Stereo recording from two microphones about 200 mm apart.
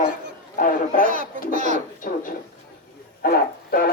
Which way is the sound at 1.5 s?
40° right (ahead or behind).